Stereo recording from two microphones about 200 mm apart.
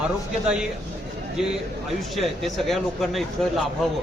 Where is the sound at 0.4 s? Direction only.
5° right (ahead or behind).